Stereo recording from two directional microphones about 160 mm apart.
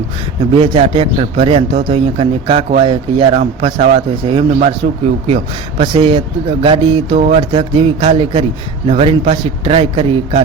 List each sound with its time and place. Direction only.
0.5 s a man's voice: 35° right (ahead or behind)
7.2 s speech: 45° right (ahead or behind)
7.5 s a man's voice: 35° right (ahead or behind)